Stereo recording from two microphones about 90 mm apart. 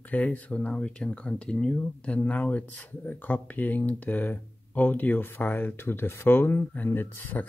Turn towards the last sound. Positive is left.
turn(degrees=20)  # may be behind; listen again after turning